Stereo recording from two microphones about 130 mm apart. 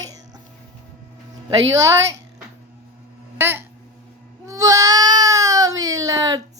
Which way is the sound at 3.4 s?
15° right (ahead or behind).